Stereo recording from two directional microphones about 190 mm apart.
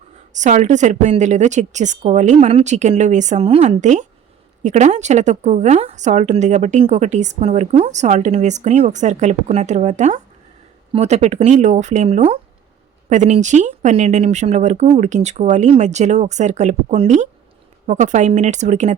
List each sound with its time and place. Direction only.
0.3 s a woman's voice: 40° right (ahead or behind)